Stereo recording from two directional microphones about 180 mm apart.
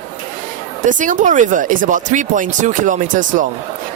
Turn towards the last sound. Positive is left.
turn(degrees=-45)  # may be behind; listen again after turning